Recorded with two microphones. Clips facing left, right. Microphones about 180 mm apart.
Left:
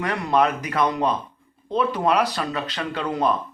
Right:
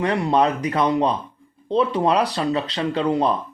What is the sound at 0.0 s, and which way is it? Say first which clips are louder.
Speech: right 2 dB; 30° right (ahead or behind).